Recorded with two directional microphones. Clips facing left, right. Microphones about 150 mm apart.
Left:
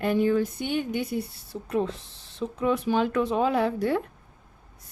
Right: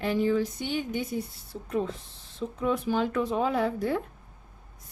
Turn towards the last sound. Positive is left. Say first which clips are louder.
# left 3 dB
turn(degrees=70)  # may be behind; listen again after turning